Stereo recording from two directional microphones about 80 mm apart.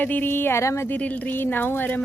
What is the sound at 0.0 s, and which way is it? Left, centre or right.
Speech, left.